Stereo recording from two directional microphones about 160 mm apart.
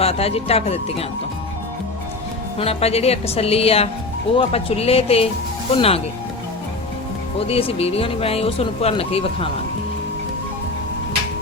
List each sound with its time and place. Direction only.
0.0 s speech: 40° left (ahead or behind)
2.6 s speech: 40° left (ahead or behind)
7.3 s speech: 35° left (ahead or behind)